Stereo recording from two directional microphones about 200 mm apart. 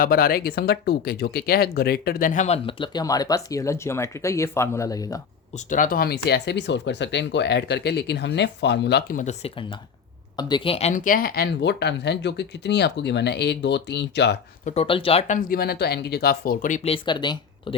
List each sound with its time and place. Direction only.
0.0 s speech: 45° left (ahead or behind); by 5.2 s 15° left (ahead or behind)
5.7 s speech: 45° left (ahead or behind); by 14.3 s 60° left (ahead or behind)
14.6 s speech: 30° left (ahead or behind)
15.4 s speech: 50° left (ahead or behind); by 17.7 s 25° left (ahead or behind)